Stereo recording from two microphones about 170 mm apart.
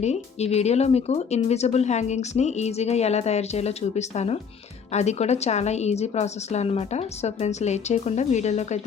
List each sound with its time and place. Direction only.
0.0 s speech: 40° left (ahead or behind)